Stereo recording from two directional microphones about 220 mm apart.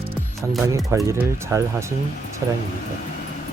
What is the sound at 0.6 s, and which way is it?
Speech, 15° right (ahead or behind).